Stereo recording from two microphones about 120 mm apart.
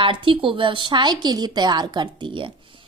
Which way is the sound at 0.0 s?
45° right (ahead or behind).